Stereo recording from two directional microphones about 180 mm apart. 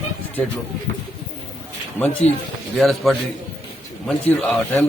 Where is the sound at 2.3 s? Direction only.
40° left (ahead or behind).